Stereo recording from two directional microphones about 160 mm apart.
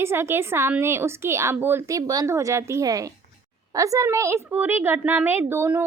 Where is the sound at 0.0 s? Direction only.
15° right (ahead or behind).